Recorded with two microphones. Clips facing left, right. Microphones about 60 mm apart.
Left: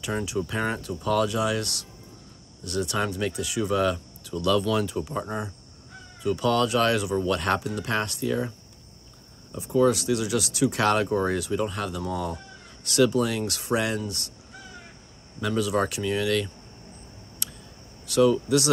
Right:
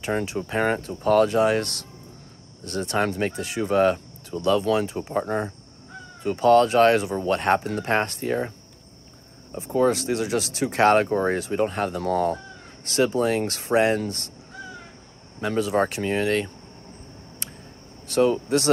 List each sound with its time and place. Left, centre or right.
0.0 s speech: right
15.4 s speech: right
17.4 s a sound: right
18.0 s speech: right